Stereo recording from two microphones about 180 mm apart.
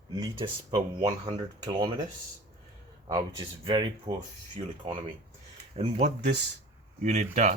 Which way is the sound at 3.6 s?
25° right (ahead or behind).